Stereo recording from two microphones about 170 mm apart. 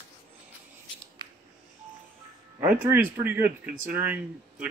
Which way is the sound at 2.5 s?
10° right (ahead or behind).